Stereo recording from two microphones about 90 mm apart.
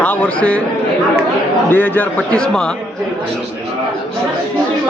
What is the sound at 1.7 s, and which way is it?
A man's voice, 20° left (ahead or behind).